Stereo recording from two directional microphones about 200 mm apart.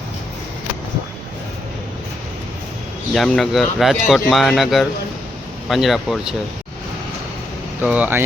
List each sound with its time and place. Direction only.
3.1 s speech: centre (ahead or behind)
7.8 s speech: 5° right (ahead or behind)